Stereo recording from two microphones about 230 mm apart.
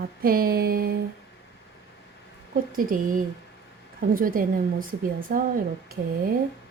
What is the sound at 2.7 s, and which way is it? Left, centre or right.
Speech, right.